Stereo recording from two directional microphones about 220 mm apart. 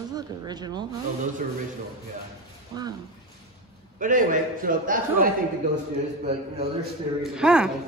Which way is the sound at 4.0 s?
35° right (ahead or behind).